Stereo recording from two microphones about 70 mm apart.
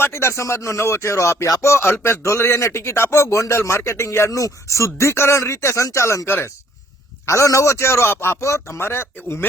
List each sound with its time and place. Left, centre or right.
0.0 s speech: left
4.3 s speech: left